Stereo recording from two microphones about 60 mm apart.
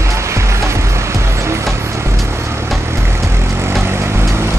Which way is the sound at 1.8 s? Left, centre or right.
Right.